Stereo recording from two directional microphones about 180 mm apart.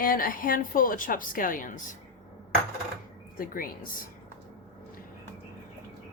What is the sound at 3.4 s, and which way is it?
Speech, 50° left (ahead or behind).